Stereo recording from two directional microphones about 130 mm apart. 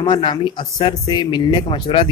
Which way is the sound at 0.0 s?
40° left (ahead or behind).